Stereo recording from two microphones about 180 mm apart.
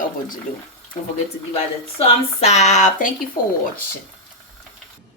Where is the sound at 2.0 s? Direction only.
35° left (ahead or behind).